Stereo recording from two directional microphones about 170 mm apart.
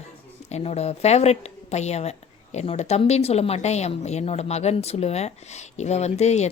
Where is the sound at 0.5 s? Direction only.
40° left (ahead or behind).